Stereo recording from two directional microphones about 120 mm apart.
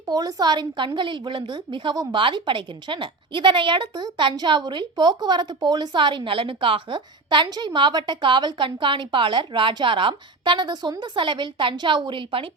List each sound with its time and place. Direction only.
0.1 s a woman's voice: 35° right (ahead or behind)